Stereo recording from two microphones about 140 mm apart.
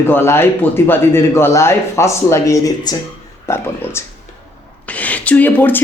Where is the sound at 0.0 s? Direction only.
15° left (ahead or behind).